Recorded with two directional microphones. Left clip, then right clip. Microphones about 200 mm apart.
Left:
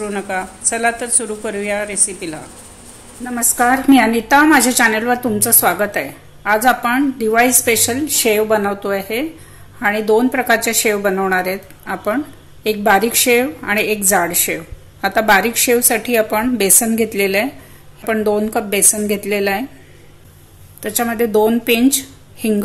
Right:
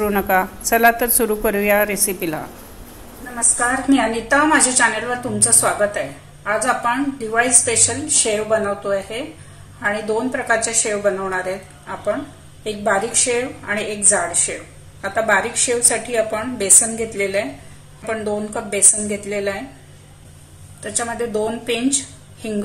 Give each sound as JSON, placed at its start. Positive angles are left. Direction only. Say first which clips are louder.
{"t": 0.0, "sound": "a woman's voice", "louder": "right 4 dB", "side_deg": -10}
{"t": 3.3, "sound": "a woman's voice", "louder": "left 5 dB", "side_deg": 50}
{"t": 12.6, "sound": "a woman's voice", "louder": "left 6 dB", "side_deg": 55}
{"t": 20.8, "sound": "a woman's voice", "louder": "left 6 dB", "side_deg": 55}